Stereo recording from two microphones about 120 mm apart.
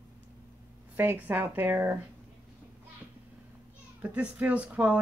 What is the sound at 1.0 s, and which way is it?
Speech, 15° right (ahead or behind).